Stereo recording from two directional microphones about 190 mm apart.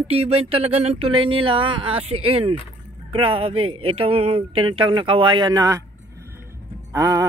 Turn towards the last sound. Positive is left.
turn(degrees=-15)  # may be behind; listen again after turning